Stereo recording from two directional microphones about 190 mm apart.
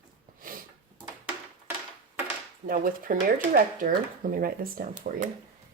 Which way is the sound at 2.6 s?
45° right (ahead or behind).